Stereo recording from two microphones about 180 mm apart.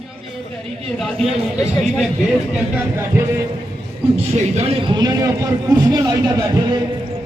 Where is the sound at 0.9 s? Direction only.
Centre (ahead or behind).